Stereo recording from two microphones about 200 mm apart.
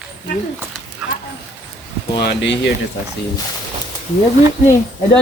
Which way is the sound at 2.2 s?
60° left (ahead or behind).